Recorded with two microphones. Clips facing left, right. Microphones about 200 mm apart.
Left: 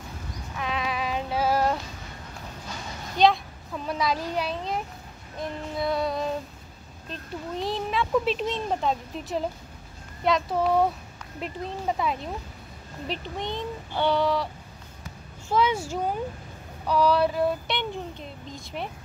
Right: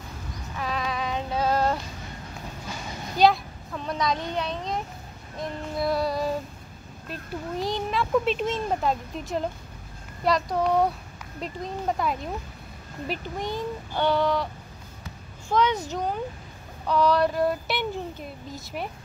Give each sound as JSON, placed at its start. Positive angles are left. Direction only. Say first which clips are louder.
{"t": 0.6, "sound": "female singing", "louder": "even", "side_deg": 0}
{"t": 3.2, "sound": "a sound", "louder": "right 1 dB", "side_deg": 0}
{"t": 4.3, "sound": "a child's voice", "louder": "even", "side_deg": 5}